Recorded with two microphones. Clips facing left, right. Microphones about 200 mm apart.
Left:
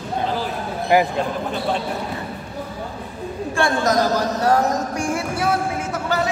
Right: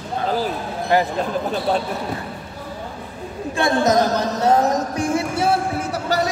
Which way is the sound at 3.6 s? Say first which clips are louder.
Right 2 dB; 20° right (ahead or behind).